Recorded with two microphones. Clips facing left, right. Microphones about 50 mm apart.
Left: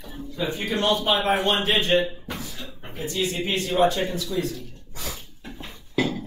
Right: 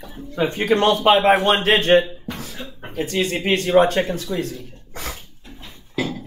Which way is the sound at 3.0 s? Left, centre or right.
Right.